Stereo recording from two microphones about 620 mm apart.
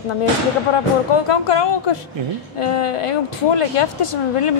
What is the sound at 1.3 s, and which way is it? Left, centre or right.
Speech, left.